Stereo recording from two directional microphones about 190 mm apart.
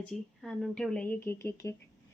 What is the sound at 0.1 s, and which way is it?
A woman's voice, centre (ahead or behind).